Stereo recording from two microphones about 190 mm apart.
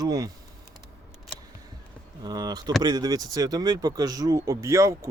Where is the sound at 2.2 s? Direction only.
20° right (ahead or behind).